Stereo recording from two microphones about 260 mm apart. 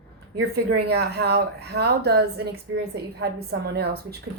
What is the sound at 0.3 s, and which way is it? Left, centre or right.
A woman's voice, right.